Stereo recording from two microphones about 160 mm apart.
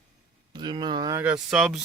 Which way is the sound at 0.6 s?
30° right (ahead or behind).